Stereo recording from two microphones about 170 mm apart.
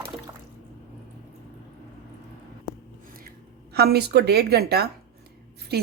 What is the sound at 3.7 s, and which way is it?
A woman's voice, 70° right (ahead or behind).